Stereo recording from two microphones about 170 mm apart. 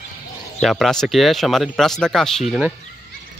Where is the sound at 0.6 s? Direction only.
Centre (ahead or behind).